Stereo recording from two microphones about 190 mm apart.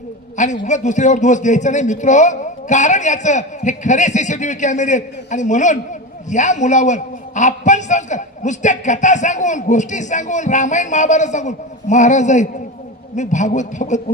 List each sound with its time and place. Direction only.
0.4 s a man's voice: 40° left (ahead or behind)